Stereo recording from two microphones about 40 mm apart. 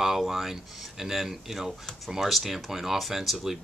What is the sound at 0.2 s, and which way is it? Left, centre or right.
Speech, centre.